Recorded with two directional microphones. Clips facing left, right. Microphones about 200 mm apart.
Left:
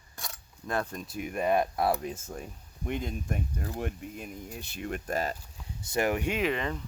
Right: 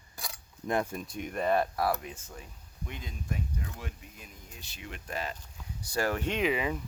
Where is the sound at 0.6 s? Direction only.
15° right (ahead or behind).